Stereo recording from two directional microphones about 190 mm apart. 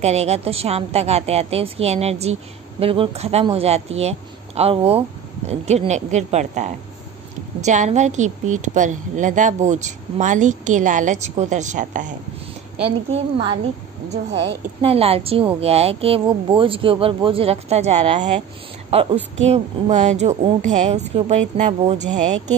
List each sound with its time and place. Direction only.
0.0 s a woman's voice: 35° right (ahead or behind)
13.1 s a woman's voice: 25° right (ahead or behind)